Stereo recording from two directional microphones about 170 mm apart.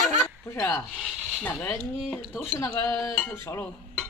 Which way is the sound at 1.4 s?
10° left (ahead or behind).